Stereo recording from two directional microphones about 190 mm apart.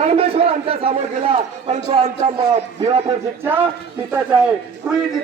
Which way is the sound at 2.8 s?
20° right (ahead or behind).